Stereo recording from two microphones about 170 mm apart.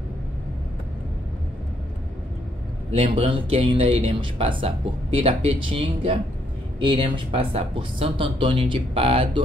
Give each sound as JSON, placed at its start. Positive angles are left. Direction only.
{"t": 2.9, "sound": "speech", "side_deg": -35}